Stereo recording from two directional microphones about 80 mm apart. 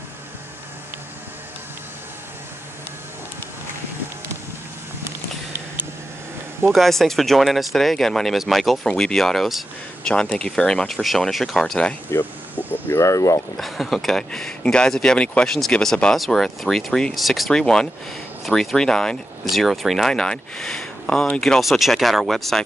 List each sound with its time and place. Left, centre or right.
6.7 s speech: centre
10.0 s speech: centre
12.1 s speech: left
13.6 s speech: centre